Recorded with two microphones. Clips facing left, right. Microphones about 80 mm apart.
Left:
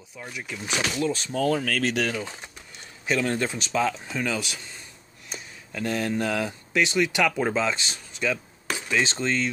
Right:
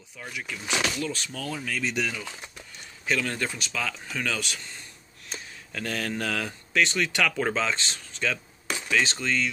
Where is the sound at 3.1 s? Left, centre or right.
Left.